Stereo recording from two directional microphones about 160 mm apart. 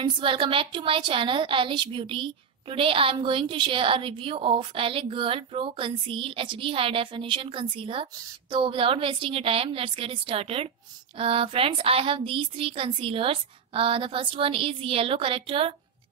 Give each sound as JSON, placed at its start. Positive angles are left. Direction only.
{"t": 0.0, "sound": "a woman's voice", "side_deg": -30}